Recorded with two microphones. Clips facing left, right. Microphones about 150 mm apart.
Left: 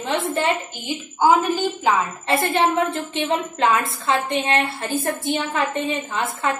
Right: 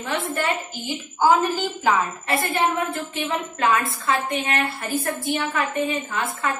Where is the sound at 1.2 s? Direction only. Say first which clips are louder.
Left 2 dB; 15° left (ahead or behind).